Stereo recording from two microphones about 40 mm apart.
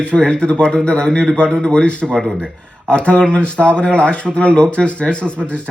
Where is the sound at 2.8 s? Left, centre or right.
Left.